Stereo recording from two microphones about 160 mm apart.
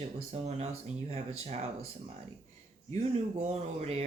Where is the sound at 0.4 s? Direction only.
40° right (ahead or behind).